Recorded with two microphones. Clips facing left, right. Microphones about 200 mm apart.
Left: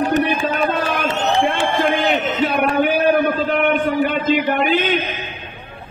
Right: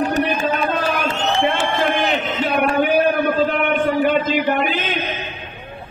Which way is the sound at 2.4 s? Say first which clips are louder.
Even; 50° left (ahead or behind).